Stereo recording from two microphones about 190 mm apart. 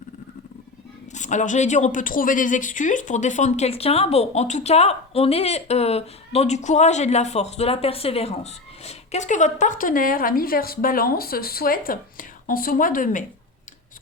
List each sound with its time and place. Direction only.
1.1 s a woman's voice: 40° left (ahead or behind)